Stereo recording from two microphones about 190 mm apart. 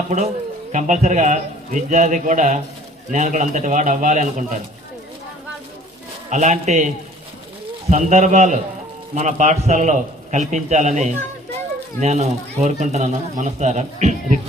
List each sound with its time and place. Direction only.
0.7 s speech: 40° right (ahead or behind)
6.3 s speech: 40° right (ahead or behind)